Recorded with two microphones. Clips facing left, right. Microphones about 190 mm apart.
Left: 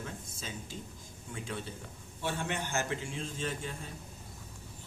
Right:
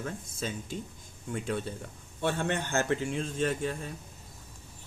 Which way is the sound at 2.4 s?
60° right (ahead or behind).